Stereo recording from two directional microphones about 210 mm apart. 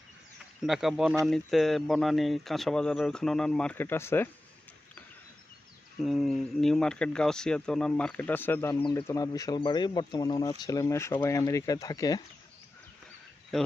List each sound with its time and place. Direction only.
0.6 s speech: centre (ahead or behind)
6.0 s speech: centre (ahead or behind)
8.8 s speech: 20° left (ahead or behind)